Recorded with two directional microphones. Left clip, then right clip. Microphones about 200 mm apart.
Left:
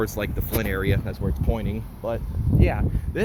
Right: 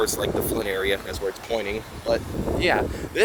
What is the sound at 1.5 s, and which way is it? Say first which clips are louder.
Speech: right 3 dB; 15° right (ahead or behind).